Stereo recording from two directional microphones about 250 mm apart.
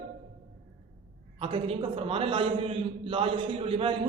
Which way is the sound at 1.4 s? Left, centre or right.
Right.